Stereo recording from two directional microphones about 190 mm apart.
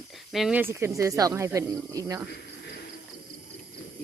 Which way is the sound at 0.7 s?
15° right (ahead or behind).